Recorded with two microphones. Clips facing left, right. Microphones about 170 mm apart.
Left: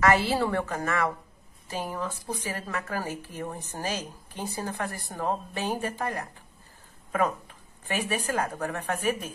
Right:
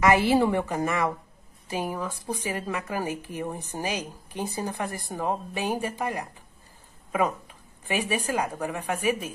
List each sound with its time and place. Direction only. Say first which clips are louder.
0.0 s a woman's voice: right 3 dB; 15° right (ahead or behind)